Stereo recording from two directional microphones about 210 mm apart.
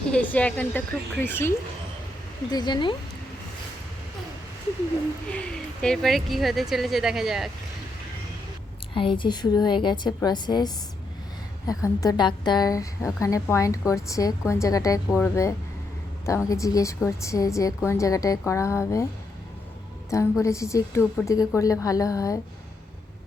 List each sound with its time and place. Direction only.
0.1 s a woman's voice: 5° left (ahead or behind)
5.3 s speech: 5° left (ahead or behind)
9.0 s a woman's voice: 25° left (ahead or behind)
20.1 s a woman's voice: 15° left (ahead or behind)